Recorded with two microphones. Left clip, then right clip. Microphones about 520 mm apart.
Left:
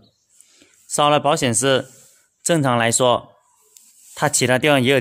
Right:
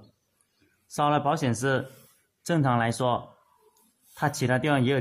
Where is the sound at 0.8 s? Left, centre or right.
Left.